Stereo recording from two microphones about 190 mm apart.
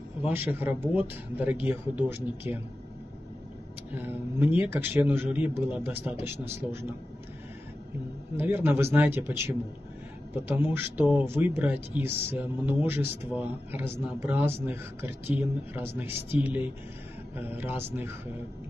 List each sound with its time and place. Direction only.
0.2 s a man's voice: 10° right (ahead or behind)
3.9 s a man's voice: 10° right (ahead or behind)
8.4 s a man's voice: 10° right (ahead or behind)
17.4 s a man's voice: 10° right (ahead or behind)